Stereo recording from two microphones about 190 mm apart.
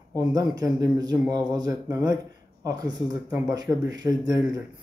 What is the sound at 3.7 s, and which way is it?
Speech, 15° right (ahead or behind).